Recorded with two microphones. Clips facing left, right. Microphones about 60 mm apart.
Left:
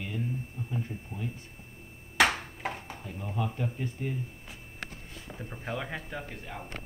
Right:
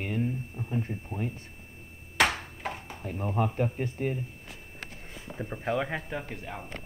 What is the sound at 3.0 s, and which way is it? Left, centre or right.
Speech, right.